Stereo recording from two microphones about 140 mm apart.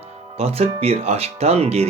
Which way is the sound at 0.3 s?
45° right (ahead or behind).